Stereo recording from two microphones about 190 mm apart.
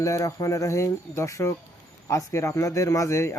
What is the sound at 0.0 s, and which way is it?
Speech, 15° left (ahead or behind).